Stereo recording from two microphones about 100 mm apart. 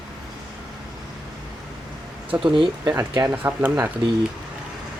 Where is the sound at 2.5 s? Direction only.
60° right (ahead or behind).